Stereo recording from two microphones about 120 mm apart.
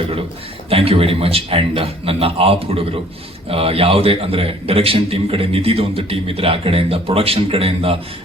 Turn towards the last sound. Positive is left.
turn(degrees=-50)  # may be behind; listen again after turning